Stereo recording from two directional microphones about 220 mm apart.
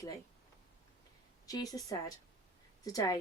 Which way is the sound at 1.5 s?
15° left (ahead or behind).